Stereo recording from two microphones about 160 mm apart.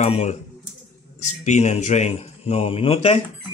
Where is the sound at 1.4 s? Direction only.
45° left (ahead or behind).